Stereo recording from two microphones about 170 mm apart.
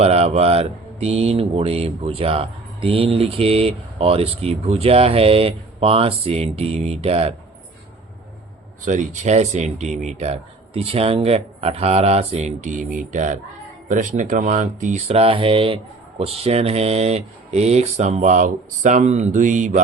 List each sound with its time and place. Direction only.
0.0 s speech: 40° right (ahead or behind)
8.8 s speech: 45° right (ahead or behind)